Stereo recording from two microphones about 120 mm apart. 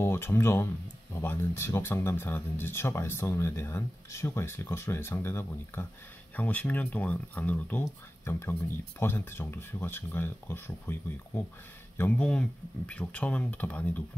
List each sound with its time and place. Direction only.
0.0 s speech: 20° left (ahead or behind)